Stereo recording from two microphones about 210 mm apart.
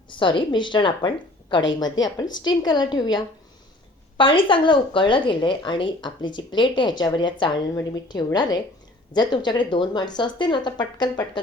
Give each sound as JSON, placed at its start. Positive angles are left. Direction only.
{"t": 0.2, "sound": "a woman's voice", "side_deg": 25}